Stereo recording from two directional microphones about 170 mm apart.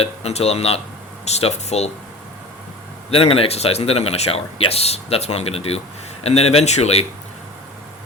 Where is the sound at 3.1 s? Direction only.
35° left (ahead or behind).